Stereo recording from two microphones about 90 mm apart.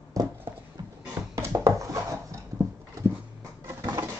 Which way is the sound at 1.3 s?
35° right (ahead or behind).